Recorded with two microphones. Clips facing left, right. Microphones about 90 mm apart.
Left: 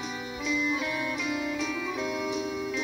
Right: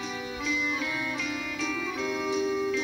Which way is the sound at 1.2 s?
20° left (ahead or behind).